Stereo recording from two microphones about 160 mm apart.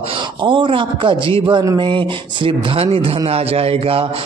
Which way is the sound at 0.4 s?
30° right (ahead or behind).